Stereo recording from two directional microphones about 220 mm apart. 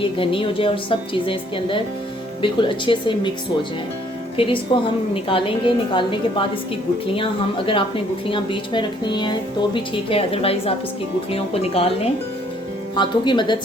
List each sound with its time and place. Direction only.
0.0 s a woman's voice: 25° left (ahead or behind)
4.4 s a woman's voice: 25° left (ahead or behind)
7.7 s a woman's voice: 25° left (ahead or behind)
13.0 s a woman's voice: 20° left (ahead or behind)